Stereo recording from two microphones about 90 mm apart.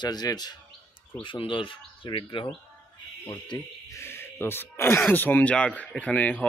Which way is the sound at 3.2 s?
60° left (ahead or behind).